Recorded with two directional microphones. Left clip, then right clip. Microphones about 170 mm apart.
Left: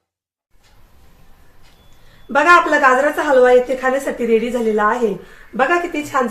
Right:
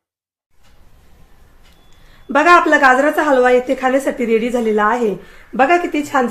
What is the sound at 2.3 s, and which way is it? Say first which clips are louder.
A woman's voice: right 1 dB; 75° right (ahead or behind).